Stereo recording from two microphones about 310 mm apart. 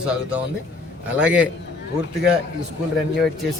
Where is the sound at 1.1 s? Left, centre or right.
Centre.